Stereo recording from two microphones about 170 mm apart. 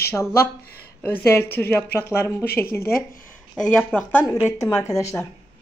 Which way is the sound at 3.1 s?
55° left (ahead or behind).